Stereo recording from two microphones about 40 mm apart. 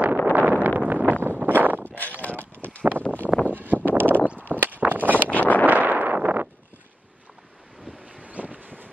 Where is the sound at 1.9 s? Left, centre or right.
Left.